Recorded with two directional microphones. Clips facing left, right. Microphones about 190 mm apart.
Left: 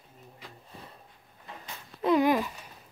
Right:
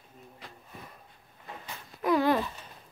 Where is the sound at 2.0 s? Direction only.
20° left (ahead or behind).